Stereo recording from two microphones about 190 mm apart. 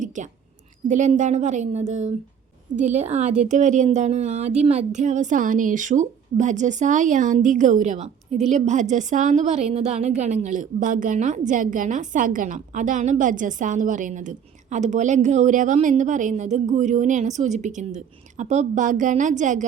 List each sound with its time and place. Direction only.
0.2 s a woman's voice: 40° right (ahead or behind)